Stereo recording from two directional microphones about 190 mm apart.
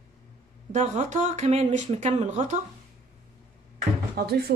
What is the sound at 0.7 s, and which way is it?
Speech, 40° right (ahead or behind).